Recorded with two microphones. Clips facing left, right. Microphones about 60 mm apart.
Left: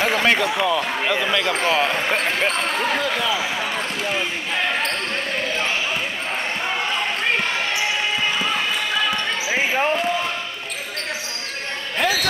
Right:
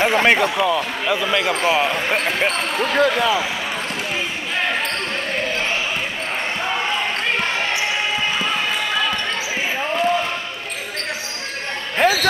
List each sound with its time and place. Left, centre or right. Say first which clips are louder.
0.0 s speech: right 3 dB; right
0.6 s speech: right 1 dB; centre
3.0 s speech: right 6 dB; right
12.0 s music: right 5 dB; right